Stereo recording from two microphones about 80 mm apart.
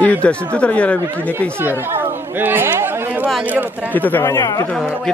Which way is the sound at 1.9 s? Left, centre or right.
Right.